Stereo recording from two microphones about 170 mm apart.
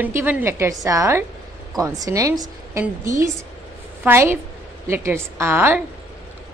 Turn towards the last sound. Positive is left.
turn(degrees=-10)  # may be behind; listen again after turning